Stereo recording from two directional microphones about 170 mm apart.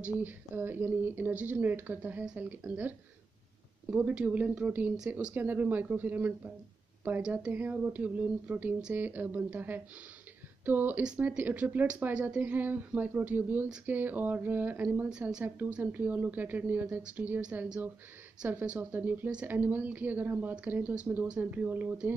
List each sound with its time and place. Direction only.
0.0 s speech: 10° right (ahead or behind)
3.9 s speech: 10° right (ahead or behind)